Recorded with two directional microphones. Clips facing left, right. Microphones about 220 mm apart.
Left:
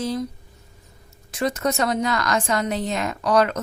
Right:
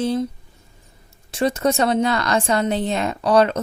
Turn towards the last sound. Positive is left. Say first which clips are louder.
# right 3 dB
turn(degrees=-30)  # may be behind; listen again after turning